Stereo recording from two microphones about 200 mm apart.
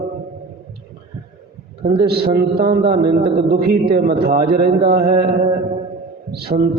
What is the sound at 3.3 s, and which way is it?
Speech, 50° right (ahead or behind).